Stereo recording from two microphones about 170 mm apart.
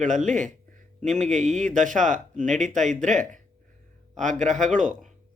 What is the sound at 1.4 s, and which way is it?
Speech, 45° right (ahead or behind).